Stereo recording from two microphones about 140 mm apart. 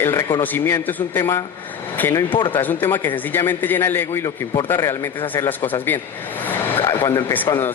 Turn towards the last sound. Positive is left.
turn(degrees=25)  # may be behind; listen again after turning